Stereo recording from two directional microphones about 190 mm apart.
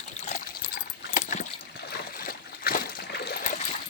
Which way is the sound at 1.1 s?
40° left (ahead or behind).